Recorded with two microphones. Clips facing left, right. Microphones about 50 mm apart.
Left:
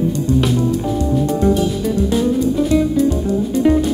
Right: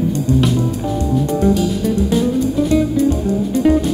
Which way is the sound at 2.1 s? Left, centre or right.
Centre.